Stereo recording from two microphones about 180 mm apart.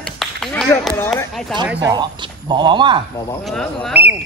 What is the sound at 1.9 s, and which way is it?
Speech, 25° right (ahead or behind).